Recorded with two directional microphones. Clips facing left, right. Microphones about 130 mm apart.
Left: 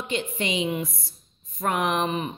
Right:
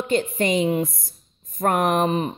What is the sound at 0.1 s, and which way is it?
A woman's voice, 45° right (ahead or behind).